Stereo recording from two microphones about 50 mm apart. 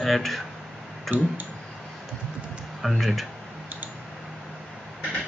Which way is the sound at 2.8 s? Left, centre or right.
Centre.